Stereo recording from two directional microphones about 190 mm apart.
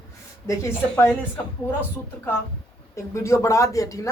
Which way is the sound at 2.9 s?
15° left (ahead or behind).